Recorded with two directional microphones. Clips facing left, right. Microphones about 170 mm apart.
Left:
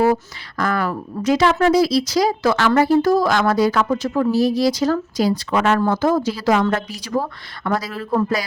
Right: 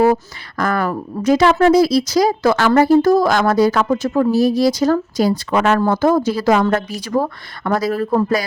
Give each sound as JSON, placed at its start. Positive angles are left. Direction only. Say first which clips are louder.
{"t": 0.6, "sound": "speech", "louder": "right 2 dB", "side_deg": -50}